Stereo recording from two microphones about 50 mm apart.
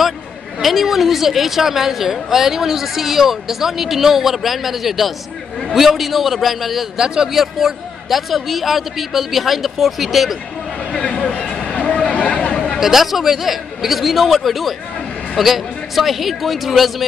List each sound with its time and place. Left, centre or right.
0.6 s a woman's voice: centre
10.9 s a sound: left
12.8 s a woman's voice: centre